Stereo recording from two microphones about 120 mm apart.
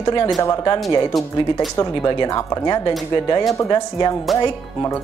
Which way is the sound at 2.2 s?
30° left (ahead or behind).